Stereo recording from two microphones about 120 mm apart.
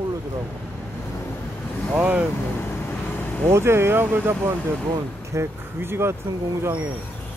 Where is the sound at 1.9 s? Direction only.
10° right (ahead or behind).